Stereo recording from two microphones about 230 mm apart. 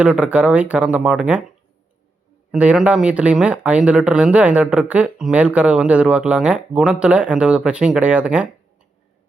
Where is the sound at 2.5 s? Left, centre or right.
Centre.